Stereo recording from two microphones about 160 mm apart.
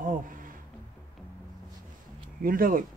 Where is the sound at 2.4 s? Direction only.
65° right (ahead or behind).